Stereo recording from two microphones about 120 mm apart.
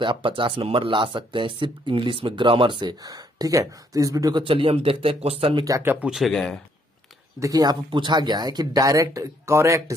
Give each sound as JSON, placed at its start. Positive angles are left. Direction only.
{"t": 0.0, "sound": "speech", "side_deg": -45}
{"t": 4.4, "sound": "speech", "side_deg": -50}
{"t": 5.7, "sound": "speech", "side_deg": -20}
{"t": 6.0, "sound": "speech", "side_deg": 0}
{"t": 7.3, "sound": "speech", "side_deg": -30}